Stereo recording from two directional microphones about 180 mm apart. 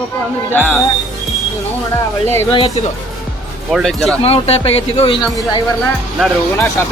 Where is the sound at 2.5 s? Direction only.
30° left (ahead or behind).